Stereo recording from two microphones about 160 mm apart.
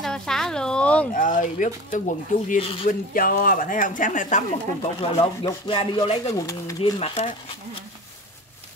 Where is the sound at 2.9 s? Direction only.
60° left (ahead or behind).